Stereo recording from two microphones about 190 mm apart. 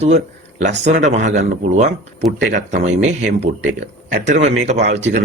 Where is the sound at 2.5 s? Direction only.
40° right (ahead or behind).